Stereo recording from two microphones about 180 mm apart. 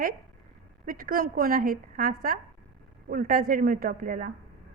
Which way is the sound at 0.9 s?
50° right (ahead or behind).